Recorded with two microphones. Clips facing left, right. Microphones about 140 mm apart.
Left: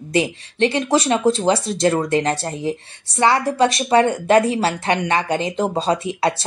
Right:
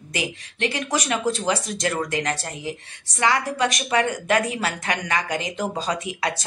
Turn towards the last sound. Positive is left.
turn(degrees=30)  # may be behind; listen again after turning